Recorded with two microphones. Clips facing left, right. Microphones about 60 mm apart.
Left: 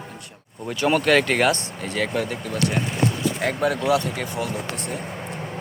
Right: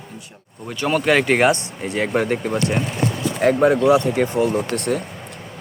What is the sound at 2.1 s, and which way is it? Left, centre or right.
Speech, right.